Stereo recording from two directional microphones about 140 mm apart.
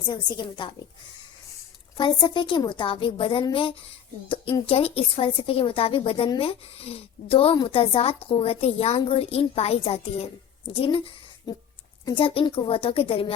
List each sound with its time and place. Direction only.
0.1 s a woman's voice: 35° left (ahead or behind)
2.0 s a woman's voice: 35° left (ahead or behind)